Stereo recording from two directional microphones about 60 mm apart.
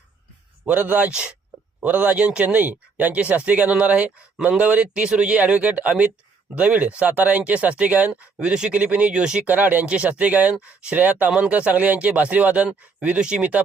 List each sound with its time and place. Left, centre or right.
0.6 s speech: right
9.5 s speech: right